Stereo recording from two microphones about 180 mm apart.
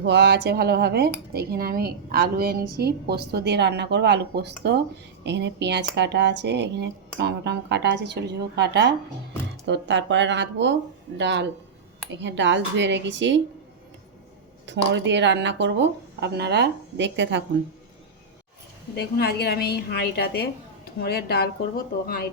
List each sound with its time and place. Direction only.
0.0 s speech: 75° right (ahead or behind)
9.6 s a woman's voice: 85° right
14.7 s a woman's voice: 80° right
18.9 s a woman's voice: 60° left (ahead or behind)